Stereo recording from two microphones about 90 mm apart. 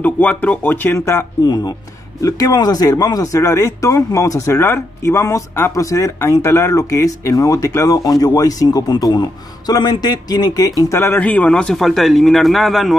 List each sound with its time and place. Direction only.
0.0 s speech: 15° left (ahead or behind)
0.9 s speech: 30° left (ahead or behind)
1.4 s a man's voice: 50° left (ahead or behind)
11.0 s speech: 25° left (ahead or behind)
11.2 s speech: 15° left (ahead or behind)
11.8 s a man's voice: centre (ahead or behind)